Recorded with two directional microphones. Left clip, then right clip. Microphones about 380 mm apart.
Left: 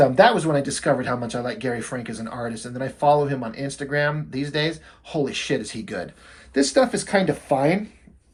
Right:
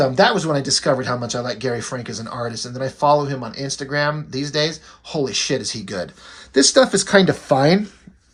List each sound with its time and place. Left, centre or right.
0.0 s speech: centre